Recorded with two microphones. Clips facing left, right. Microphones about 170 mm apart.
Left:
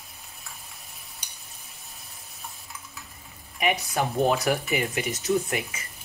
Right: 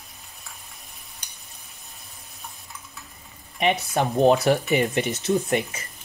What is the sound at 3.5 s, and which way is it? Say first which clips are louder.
Speech: right 3 dB; 25° right (ahead or behind).